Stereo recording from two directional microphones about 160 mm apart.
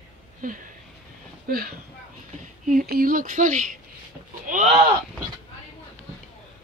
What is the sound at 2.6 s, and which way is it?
Speech, 55° right (ahead or behind).